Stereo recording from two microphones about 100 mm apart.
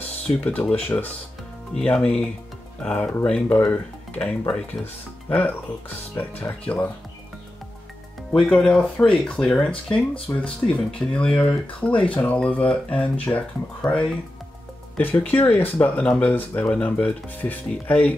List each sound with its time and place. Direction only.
0.4 s speech: 15° left (ahead or behind)
8.3 s speech: 10° left (ahead or behind)
15.0 s speech: 20° left (ahead or behind)